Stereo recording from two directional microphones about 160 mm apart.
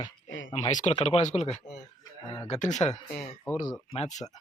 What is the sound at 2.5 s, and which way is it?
Speech, 45° left (ahead or behind).